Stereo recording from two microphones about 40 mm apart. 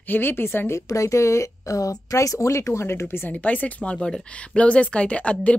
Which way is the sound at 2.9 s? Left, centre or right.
Left.